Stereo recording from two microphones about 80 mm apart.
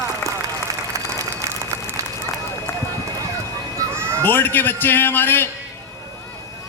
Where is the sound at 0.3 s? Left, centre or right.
Right.